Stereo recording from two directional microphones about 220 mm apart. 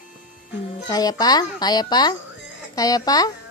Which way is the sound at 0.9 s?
15° left (ahead or behind).